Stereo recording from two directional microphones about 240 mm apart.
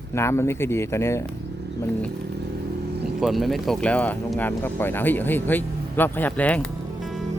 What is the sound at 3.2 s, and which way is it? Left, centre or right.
Speech, centre.